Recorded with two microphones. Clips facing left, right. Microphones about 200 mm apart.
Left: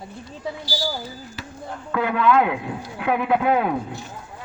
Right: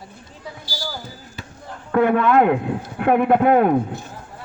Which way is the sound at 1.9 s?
50° right (ahead or behind).